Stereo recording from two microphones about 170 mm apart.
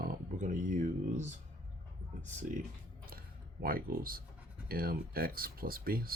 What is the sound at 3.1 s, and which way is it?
Computer keyboard, 60° right (ahead or behind).